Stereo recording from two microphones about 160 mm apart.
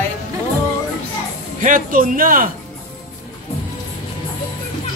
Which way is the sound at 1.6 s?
60° right (ahead or behind).